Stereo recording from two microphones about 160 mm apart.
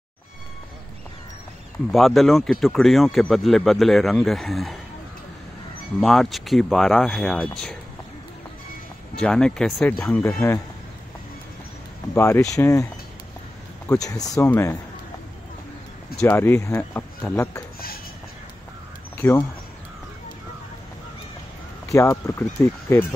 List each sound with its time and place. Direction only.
1.9 s speech: centre (ahead or behind)
5.9 s speech: centre (ahead or behind)
9.1 s speech: 5° left (ahead or behind)
12.1 s speech: 15° left (ahead or behind)
13.8 s speech: 20° left (ahead or behind)
16.2 s speech: 10° left (ahead or behind)
17.7 s a sound: 70° left (ahead or behind)
19.1 s a sound: 15° left (ahead or behind)
21.8 s speech: 20° left (ahead or behind)